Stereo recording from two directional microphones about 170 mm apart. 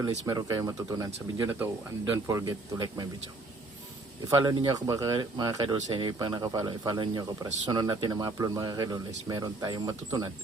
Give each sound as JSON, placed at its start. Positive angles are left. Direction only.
{"t": 0.3, "sound": "speech", "side_deg": -20}
{"t": 1.5, "sound": "speech", "side_deg": -10}
{"t": 2.2, "sound": "speech", "side_deg": -20}
{"t": 4.3, "sound": "speech", "side_deg": -20}